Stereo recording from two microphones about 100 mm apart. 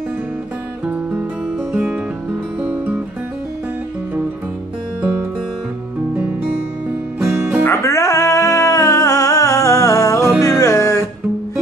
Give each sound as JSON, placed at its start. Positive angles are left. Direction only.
{"t": 2.6, "sound": "music", "side_deg": -20}
{"t": 7.2, "sound": "music", "side_deg": -25}
{"t": 7.6, "sound": "music", "side_deg": 25}